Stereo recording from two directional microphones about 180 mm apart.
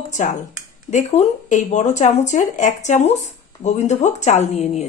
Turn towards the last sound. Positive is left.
turn(degrees=40)  # may be behind; listen again after turning